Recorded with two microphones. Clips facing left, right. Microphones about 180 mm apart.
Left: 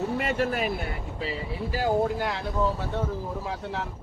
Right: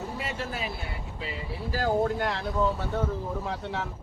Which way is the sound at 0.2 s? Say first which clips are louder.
Left 7 dB; 60° left (ahead or behind).